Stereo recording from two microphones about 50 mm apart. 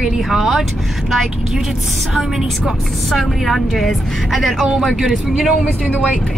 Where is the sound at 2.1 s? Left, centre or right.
Centre.